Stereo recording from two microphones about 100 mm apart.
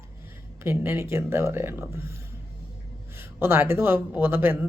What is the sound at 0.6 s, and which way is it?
Speech, 20° right (ahead or behind).